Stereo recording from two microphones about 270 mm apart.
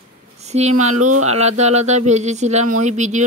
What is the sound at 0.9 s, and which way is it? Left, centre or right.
Speech, right.